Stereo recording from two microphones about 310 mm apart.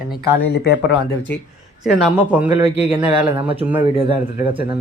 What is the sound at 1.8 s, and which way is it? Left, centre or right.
Speech, centre.